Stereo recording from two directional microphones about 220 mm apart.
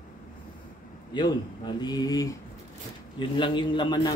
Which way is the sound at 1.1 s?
20° left (ahead or behind).